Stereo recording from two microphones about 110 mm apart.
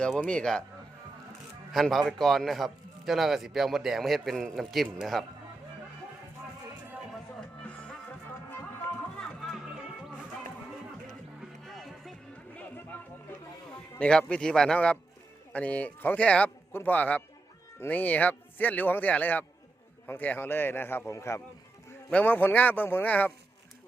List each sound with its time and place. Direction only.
0.2 s speech: 10° left (ahead or behind)
1.7 s a man's voice: centre (ahead or behind)
9.1 s music: centre (ahead or behind)
9.6 s music: 10° right (ahead or behind)
11.3 s music: centre (ahead or behind)
12.5 s music: 15° left (ahead or behind)
14.0 s a man's voice: 10° left (ahead or behind); by 21.4 s 25° left (ahead or behind)
22.1 s speech: 15° left (ahead or behind)